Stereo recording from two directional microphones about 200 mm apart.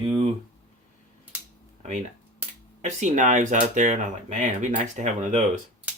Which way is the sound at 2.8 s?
35° right (ahead or behind).